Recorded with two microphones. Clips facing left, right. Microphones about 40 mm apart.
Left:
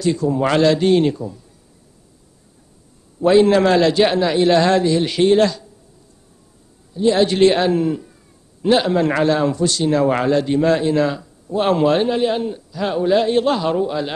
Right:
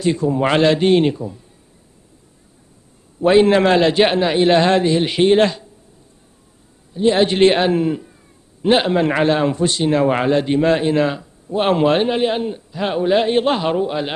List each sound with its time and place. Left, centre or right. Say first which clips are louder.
0.0 s a man's voice: right 1 dB; right
3.3 s a man's voice: even; right
6.9 s a man's voice: even; right